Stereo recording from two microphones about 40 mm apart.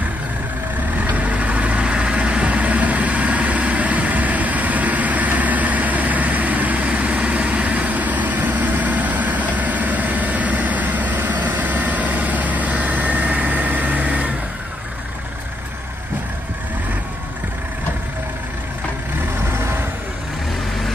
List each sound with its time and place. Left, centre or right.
1.1 s vehicle: right